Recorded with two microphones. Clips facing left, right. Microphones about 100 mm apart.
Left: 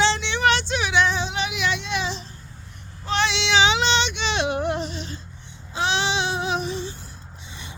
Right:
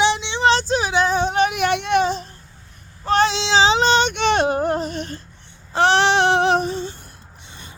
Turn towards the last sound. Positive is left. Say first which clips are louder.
# left 1 dB
turn(degrees=-55)  # may be behind; listen again after turning